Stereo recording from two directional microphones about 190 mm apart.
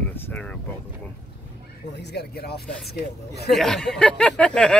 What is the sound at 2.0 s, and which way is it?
Speech, 60° left (ahead or behind).